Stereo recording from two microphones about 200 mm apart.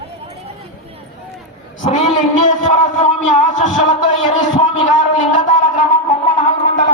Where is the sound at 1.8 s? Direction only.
35° left (ahead or behind).